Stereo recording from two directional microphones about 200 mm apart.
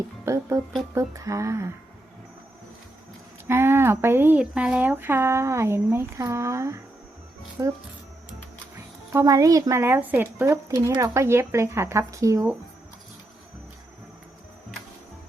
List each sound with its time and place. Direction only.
0.3 s speech: 15° right (ahead or behind)
3.4 s speech: 10° right (ahead or behind)
9.1 s speech: 15° right (ahead or behind)